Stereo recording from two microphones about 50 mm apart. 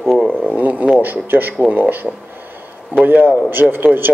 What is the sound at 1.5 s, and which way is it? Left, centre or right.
Speech, right.